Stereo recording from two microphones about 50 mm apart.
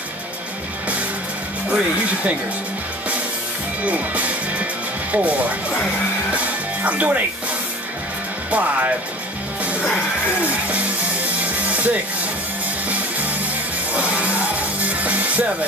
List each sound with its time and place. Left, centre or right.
1.7 s speech: right
3.8 s music: right
5.1 s speech: right
6.3 s music: right
8.5 s speech: right
10.4 s music: right
13.9 s music: right